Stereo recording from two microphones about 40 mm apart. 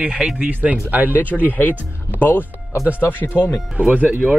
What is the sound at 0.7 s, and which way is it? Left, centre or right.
Speech, right.